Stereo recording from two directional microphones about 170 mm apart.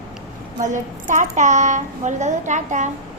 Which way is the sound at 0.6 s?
50° right (ahead or behind).